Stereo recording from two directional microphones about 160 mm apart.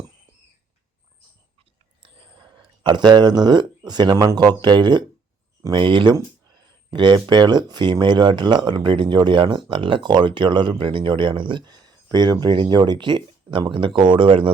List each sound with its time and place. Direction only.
2.0 s speech: 35° right (ahead or behind)